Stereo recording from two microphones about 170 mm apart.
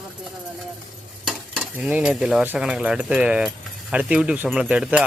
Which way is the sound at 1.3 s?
Centre (ahead or behind).